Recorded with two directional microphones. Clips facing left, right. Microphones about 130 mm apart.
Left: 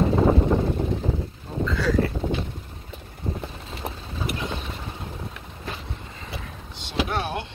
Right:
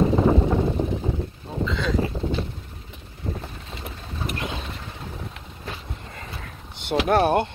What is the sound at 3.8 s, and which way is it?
Vehicle, 90° left.